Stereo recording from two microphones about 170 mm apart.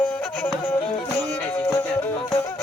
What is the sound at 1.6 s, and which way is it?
Music, 15° left (ahead or behind).